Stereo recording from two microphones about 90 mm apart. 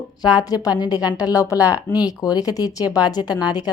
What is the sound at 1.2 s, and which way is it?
A woman's voice, 40° left (ahead or behind).